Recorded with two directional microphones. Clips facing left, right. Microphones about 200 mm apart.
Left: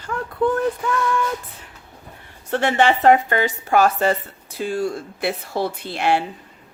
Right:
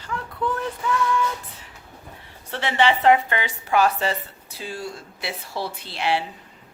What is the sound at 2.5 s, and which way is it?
Speech, 50° left (ahead or behind).